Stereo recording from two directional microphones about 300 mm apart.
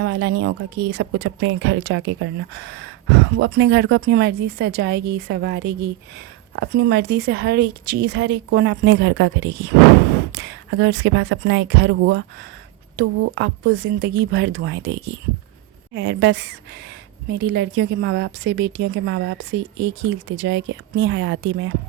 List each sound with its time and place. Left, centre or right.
0.0 s a woman's voice: right